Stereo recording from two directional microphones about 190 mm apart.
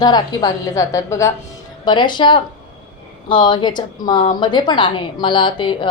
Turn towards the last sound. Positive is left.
turn(degrees=25)  # may be behind; listen again after turning